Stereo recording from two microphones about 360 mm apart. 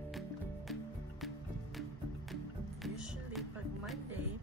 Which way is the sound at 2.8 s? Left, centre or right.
Centre.